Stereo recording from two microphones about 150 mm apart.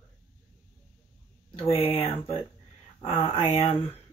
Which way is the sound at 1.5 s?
40° left (ahead or behind).